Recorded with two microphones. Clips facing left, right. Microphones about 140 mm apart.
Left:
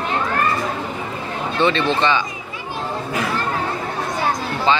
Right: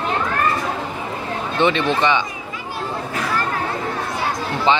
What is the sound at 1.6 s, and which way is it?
Speech, 15° right (ahead or behind).